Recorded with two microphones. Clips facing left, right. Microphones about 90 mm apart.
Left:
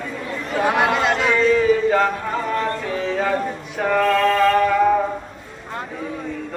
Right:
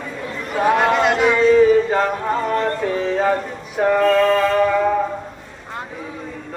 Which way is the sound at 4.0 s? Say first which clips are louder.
Right 2 dB; 5° right (ahead or behind).